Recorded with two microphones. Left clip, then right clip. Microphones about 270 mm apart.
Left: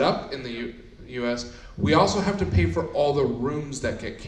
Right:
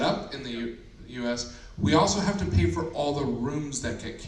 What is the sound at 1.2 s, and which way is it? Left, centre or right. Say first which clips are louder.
A man's voice: left 3 dB; right.